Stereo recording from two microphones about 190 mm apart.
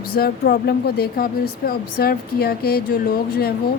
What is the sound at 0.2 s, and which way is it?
Speech, 55° left (ahead or behind).